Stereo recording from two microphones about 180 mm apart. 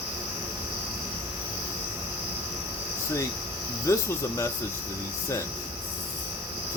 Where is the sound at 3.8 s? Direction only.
15° left (ahead or behind).